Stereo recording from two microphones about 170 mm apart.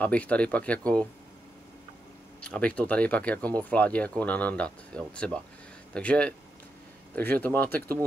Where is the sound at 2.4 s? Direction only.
5° left (ahead or behind).